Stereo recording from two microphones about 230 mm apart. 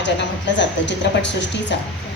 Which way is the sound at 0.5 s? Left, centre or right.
Left.